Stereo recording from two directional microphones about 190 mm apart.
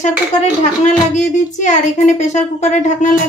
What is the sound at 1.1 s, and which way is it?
Speech, 40° left (ahead or behind).